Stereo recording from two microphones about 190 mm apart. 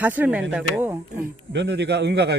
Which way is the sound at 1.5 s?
65° right (ahead or behind).